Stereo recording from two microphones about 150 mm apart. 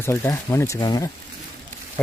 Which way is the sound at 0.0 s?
20° left (ahead or behind).